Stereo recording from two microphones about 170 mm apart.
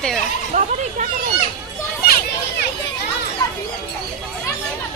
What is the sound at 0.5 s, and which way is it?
Chatter, 50° right (ahead or behind).